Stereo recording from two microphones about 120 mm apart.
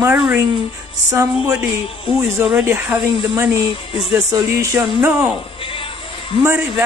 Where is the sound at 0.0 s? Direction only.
15° right (ahead or behind).